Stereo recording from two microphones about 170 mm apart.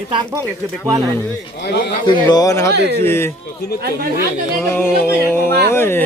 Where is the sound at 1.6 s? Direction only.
70° left (ahead or behind).